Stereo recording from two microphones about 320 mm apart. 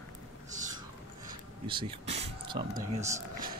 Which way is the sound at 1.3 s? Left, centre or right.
Centre.